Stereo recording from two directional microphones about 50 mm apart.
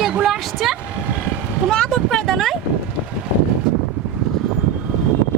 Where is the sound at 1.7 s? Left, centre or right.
Centre.